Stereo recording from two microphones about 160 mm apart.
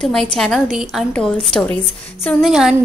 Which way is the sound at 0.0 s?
5° left (ahead or behind).